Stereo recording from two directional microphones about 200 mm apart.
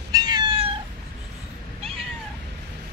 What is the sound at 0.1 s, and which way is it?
Cat, 20° right (ahead or behind).